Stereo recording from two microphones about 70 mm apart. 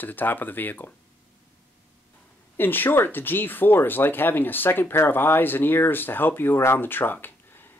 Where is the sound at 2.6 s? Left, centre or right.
Left.